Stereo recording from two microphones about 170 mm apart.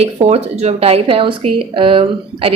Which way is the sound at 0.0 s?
40° right (ahead or behind).